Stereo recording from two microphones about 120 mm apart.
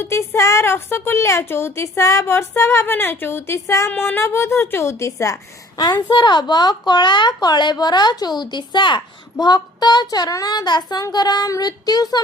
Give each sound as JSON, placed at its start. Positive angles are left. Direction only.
{"t": 0.0, "sound": "a woman's voice", "side_deg": 25}